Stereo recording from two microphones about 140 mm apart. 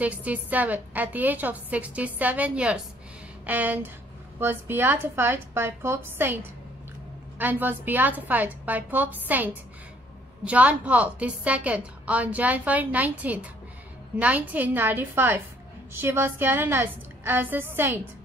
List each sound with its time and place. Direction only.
0.0 s a woman's voice: 10° right (ahead or behind)